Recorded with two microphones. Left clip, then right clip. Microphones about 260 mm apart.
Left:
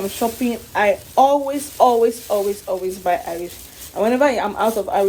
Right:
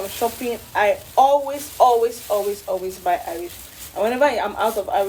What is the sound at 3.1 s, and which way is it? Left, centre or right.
Speech, left.